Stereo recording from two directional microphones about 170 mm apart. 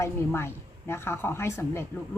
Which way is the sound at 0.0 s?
15° left (ahead or behind).